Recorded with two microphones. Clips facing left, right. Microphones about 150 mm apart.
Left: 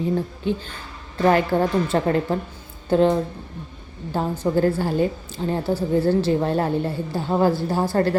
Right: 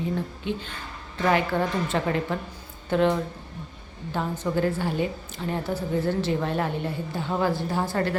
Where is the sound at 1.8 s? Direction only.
40° left (ahead or behind).